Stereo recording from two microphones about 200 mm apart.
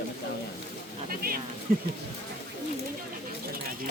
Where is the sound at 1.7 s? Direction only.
45° right (ahead or behind).